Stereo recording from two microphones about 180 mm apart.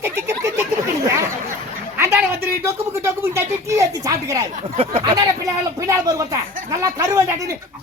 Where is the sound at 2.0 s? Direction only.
10° right (ahead or behind).